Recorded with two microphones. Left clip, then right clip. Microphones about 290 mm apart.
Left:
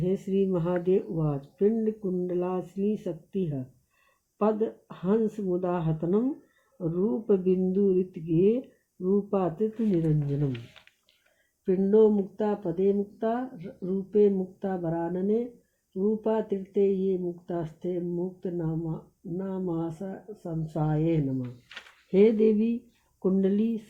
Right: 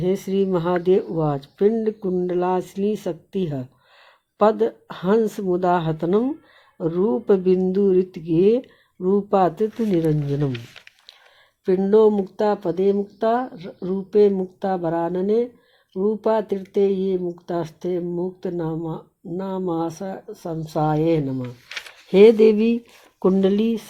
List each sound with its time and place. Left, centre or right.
0.0 s speech: right